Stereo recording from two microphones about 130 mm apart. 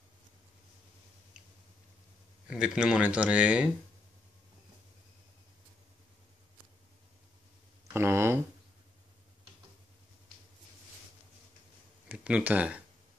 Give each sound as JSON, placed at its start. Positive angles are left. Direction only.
{"t": 2.5, "sound": "speech", "side_deg": -5}
{"t": 7.9, "sound": "speech", "side_deg": -20}
{"t": 12.1, "sound": "speech", "side_deg": -10}